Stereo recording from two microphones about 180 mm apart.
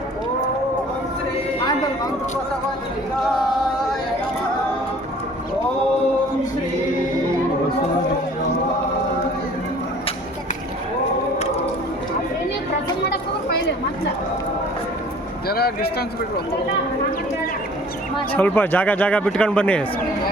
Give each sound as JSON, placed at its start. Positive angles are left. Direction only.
{"t": 15.4, "sound": "speech", "side_deg": 60}
{"t": 18.3, "sound": "speech", "side_deg": 10}